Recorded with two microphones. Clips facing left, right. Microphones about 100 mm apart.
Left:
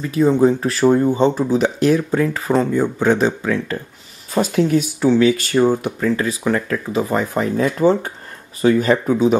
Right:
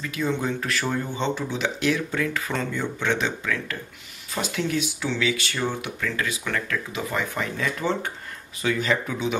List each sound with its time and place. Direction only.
0.0 s speech: 35° left (ahead or behind)
4.3 s speech: 40° left (ahead or behind)